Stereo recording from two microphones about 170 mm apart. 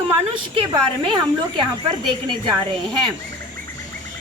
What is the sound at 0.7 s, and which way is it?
A woman's voice, 25° right (ahead or behind).